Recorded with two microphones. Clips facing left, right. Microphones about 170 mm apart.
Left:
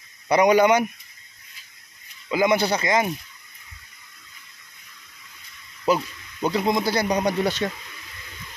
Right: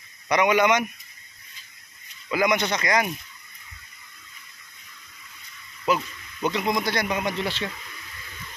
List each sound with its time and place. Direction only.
0.3 s speech: 35° left (ahead or behind)
2.2 s speech: 25° left (ahead or behind)
5.9 s speech: 30° left (ahead or behind)